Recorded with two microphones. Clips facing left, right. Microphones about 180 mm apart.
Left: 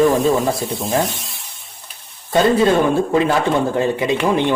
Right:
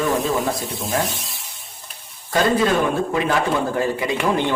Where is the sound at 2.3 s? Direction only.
30° left (ahead or behind).